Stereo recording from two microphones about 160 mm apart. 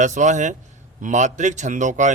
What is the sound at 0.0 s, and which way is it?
A man's voice, 50° right (ahead or behind).